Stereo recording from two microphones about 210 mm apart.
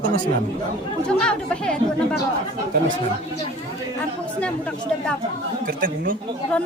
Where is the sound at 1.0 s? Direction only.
5° left (ahead or behind).